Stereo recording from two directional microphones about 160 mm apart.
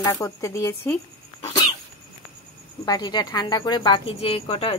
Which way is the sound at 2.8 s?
25° left (ahead or behind).